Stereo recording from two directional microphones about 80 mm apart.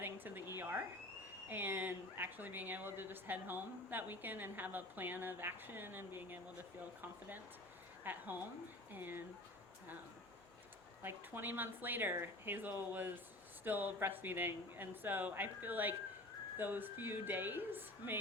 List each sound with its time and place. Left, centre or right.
0.0 s a sound: right
1.5 s speech: right
11.0 s speech: right